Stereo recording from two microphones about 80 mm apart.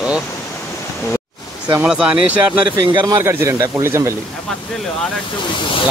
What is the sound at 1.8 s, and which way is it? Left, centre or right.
Speech, centre.